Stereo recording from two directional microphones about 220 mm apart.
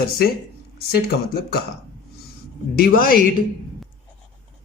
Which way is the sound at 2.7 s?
40° left (ahead or behind).